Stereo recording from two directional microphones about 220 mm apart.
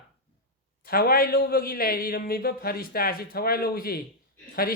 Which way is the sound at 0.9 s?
40° left (ahead or behind).